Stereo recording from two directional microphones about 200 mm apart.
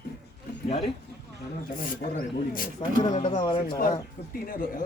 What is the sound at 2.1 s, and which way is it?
Speech, 45° left (ahead or behind).